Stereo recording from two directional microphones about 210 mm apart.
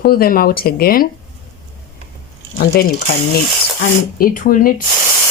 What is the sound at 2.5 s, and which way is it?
Speech, 45° left (ahead or behind).